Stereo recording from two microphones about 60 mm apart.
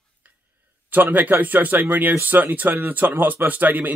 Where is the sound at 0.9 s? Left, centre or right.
Right.